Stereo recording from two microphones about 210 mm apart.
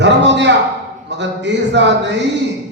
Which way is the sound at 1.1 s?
55° right (ahead or behind).